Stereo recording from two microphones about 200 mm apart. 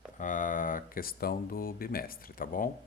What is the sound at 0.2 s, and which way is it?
Speech, 40° left (ahead or behind).